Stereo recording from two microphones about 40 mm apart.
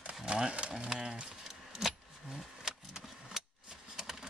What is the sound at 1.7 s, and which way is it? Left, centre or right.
Vehicle, centre.